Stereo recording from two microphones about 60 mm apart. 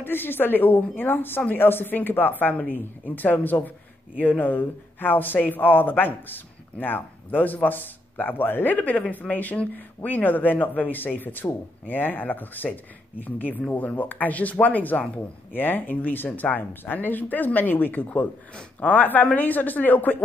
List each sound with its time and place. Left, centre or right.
0.0 s speech: left